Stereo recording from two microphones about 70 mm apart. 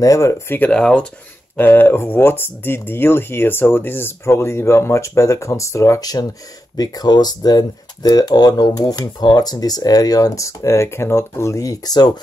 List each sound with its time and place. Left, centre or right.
0.0 s speech: left
0.7 s speech: centre
1.6 s speech: left